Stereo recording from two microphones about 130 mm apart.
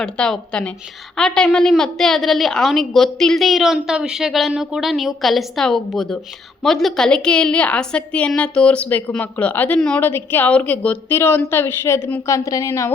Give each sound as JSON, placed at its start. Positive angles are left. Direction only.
{"t": 0.0, "sound": "a woman's voice", "side_deg": 5}